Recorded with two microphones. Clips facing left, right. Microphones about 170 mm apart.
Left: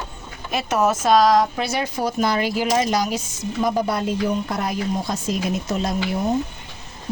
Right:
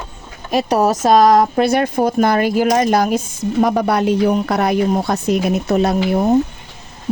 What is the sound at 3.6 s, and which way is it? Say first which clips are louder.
A woman's voice: right 6 dB; 70° right (ahead or behind).